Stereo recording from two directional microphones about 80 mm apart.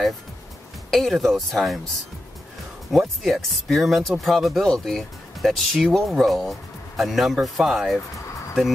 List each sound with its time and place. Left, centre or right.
0.8 s speech: centre
2.9 s speech: centre